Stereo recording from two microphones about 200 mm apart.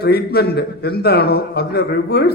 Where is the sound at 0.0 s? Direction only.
50° left (ahead or behind).